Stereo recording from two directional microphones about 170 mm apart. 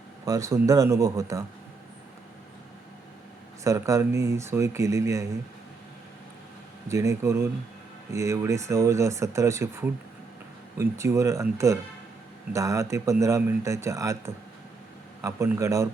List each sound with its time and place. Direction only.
0.3 s speech: 20° right (ahead or behind)
3.6 s speech: 20° right (ahead or behind)
6.8 s speech: 15° right (ahead or behind)